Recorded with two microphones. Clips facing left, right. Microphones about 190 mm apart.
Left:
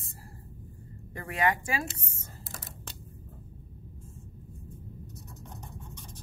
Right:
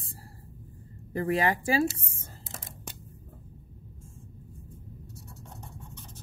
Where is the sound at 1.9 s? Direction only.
30° right (ahead or behind).